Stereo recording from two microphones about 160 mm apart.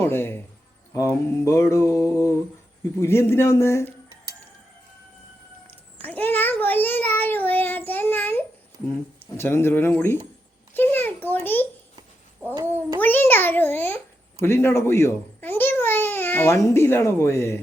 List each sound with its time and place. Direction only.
0.0 s a man's voice: 15° left (ahead or behind)
0.9 s mantra: 20° left (ahead or behind)
6.0 s child singing: 10° left (ahead or behind)
9.4 s mantra: 15° left (ahead or behind)
10.8 s a child's voice: 10° left (ahead or behind)
13.0 s mantra: 10° left (ahead or behind)
14.8 s speech: 15° left (ahead or behind)